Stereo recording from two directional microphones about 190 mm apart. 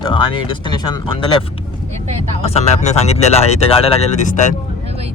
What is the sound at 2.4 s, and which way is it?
Speech, 35° left (ahead or behind).